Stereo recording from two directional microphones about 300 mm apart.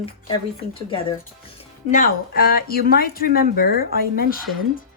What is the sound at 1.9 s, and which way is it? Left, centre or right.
Speech, left.